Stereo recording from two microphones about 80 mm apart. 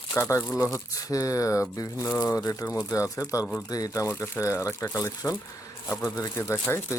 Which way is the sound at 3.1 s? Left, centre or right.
Left.